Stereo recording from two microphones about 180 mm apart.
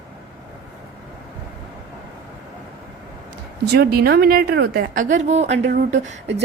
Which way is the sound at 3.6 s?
65° right (ahead or behind).